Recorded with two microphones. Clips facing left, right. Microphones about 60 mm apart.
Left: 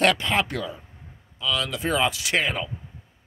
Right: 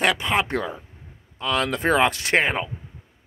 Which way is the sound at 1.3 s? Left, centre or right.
Right.